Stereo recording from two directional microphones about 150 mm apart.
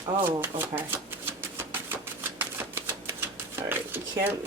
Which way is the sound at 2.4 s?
15° right (ahead or behind).